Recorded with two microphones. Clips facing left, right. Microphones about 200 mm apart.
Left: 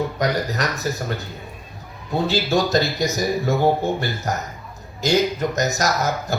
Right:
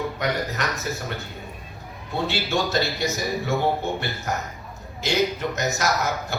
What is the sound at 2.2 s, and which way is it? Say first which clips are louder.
Speech: left 5 dB; 40° left (ahead or behind).